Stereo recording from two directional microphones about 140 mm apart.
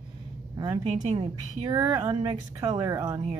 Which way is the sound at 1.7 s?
25° right (ahead or behind).